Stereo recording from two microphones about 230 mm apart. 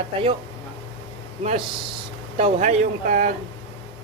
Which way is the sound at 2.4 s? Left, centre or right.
Right.